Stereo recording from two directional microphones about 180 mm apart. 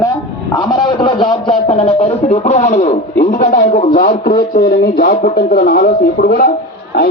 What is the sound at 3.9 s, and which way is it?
A man's voice, 55° left (ahead or behind).